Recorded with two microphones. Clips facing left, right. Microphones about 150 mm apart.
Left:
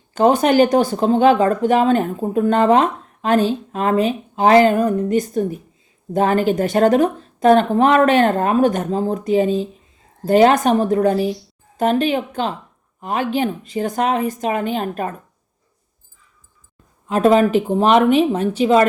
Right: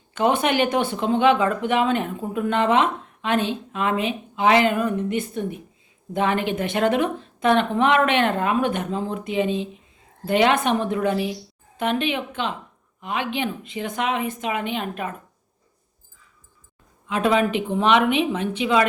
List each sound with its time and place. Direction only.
0.1 s speech: 40° left (ahead or behind)
17.1 s speech: 40° left (ahead or behind)